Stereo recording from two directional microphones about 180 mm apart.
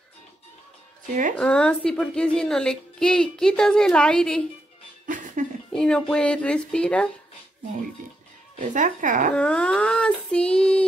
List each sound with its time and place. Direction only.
1.3 s a woman's voice: 5° left (ahead or behind)
5.0 s music: 45° right (ahead or behind)
5.7 s a woman's voice: 5° left (ahead or behind)
8.5 s speech: 45° right (ahead or behind)
9.3 s child singing: 5° left (ahead or behind)